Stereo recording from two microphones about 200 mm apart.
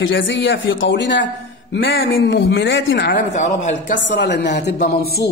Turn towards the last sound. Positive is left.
turn(degrees=50)  # may be behind; listen again after turning